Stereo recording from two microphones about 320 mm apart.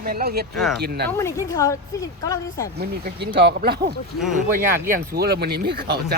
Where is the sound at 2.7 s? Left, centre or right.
Right.